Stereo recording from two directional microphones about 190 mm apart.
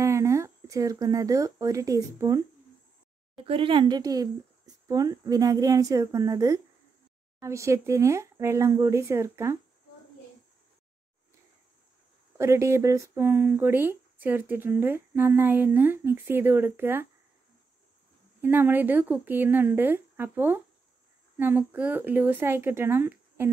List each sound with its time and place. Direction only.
0.0 s speech: 15° right (ahead or behind)
3.3 s speech: 30° right (ahead or behind)
12.4 s speech: 15° right (ahead or behind)
18.4 s speech: 10° right (ahead or behind)